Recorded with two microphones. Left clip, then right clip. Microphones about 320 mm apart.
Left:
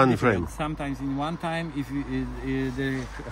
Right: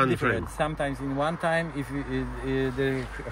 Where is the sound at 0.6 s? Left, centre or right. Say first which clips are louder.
Right 3 dB; centre.